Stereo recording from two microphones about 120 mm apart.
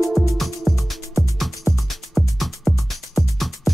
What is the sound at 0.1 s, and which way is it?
Music, centre (ahead or behind).